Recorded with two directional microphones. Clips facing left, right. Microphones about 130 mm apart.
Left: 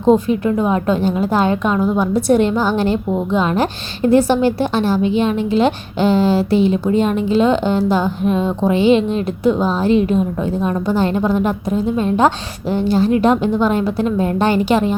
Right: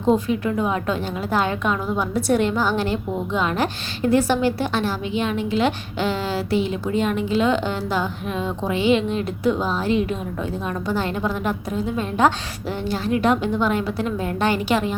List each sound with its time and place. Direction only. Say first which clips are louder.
0.0 s a woman's voice: left 6 dB; 30° left (ahead or behind)